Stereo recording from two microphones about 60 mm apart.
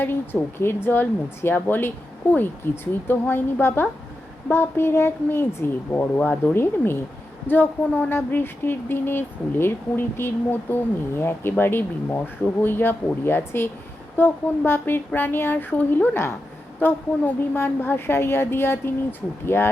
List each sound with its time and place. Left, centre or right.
0.0 s speech: left